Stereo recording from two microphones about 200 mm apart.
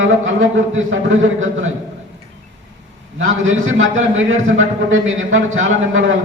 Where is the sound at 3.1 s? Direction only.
75° right (ahead or behind).